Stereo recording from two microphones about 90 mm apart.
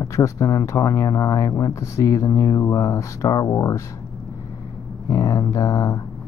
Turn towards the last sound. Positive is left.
turn(degrees=35)  # may be behind; listen again after turning